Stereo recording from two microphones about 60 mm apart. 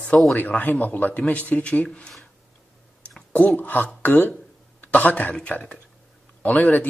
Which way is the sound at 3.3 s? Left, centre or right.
Left.